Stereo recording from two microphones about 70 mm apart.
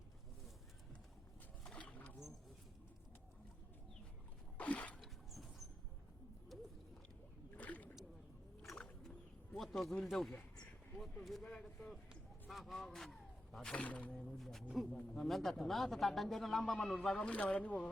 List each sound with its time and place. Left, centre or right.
1.6 s boat: centre
4.5 s a sound: left
4.9 s a sound: centre
7.5 s rowboat: left
8.7 s a sound: centre
9.9 s a man's voice: centre
13.6 s speech: centre
14.3 s a man's voice: centre
17.2 s speech: centre